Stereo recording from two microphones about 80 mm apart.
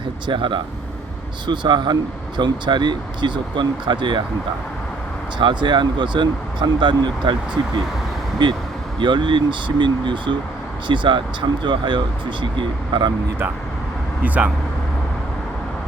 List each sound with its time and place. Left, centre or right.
0.3 s speech: right
1.5 s speech: right
5.4 s speech: right
9.0 s speech: right
14.3 s speech: centre